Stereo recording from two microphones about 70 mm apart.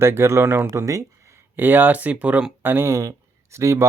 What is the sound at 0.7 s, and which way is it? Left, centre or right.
Speech, right.